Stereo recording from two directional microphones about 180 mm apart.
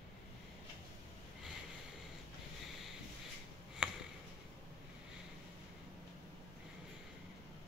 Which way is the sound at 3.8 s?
5° right (ahead or behind).